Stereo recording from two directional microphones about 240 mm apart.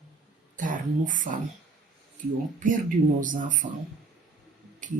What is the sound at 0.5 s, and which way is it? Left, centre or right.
Speech, right.